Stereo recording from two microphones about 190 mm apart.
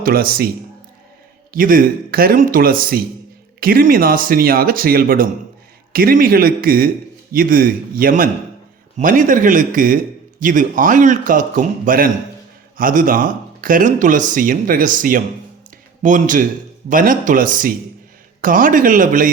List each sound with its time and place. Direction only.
0.0 s speech: 50° right (ahead or behind)
1.5 s speech: 45° right (ahead or behind)